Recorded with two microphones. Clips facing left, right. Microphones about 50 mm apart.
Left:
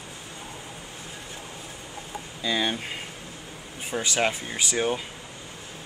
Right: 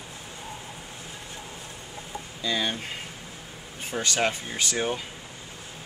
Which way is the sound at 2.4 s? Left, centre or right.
Centre.